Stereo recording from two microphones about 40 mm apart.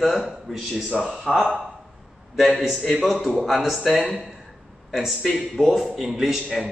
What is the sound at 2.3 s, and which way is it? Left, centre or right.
A man's voice, centre.